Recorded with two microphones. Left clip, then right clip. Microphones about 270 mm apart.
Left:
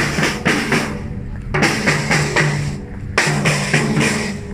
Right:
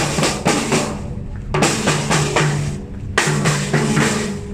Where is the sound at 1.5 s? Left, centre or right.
Centre.